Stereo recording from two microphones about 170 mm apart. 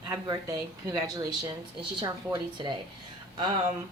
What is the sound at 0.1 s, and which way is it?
Speech, 15° right (ahead or behind).